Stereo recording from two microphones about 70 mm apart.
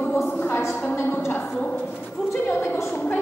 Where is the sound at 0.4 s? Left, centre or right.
Left.